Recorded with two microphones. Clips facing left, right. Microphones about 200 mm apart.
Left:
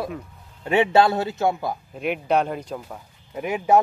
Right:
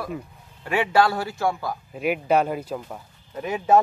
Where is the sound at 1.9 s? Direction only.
5° right (ahead or behind).